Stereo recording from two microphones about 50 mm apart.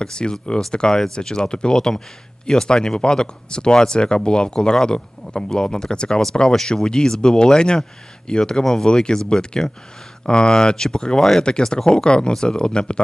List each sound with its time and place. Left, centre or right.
0.0 s speech: centre